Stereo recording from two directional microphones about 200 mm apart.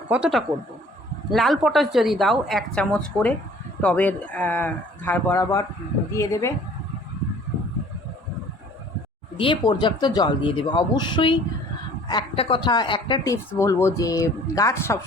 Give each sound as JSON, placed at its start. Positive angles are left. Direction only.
{"t": 0.1, "sound": "a woman's voice", "side_deg": -5}
{"t": 9.4, "sound": "a woman's voice", "side_deg": 25}